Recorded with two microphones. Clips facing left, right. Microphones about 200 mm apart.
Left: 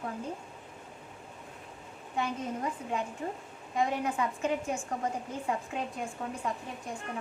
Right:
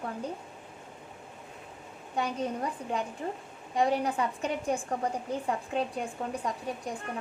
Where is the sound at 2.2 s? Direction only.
35° right (ahead or behind).